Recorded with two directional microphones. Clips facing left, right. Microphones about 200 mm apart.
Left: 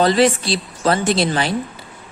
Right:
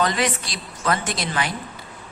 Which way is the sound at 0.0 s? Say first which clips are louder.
Left 8 dB; 30° left (ahead or behind).